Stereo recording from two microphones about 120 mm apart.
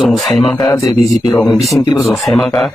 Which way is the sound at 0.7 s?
25° left (ahead or behind).